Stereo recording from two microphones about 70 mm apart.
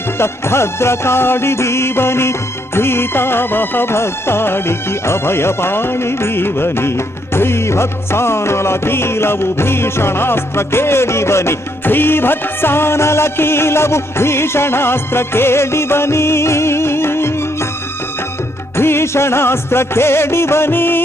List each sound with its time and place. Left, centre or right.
0.2 s music: left
18.8 s music: left